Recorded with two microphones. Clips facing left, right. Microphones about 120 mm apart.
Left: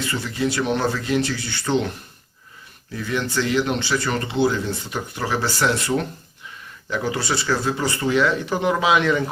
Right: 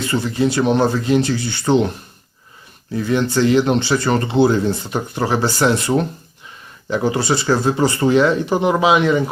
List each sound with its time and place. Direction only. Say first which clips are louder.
0.1 s speech: right 8 dB; 25° right (ahead or behind)
2.9 s speech: right 7 dB; 25° right (ahead or behind)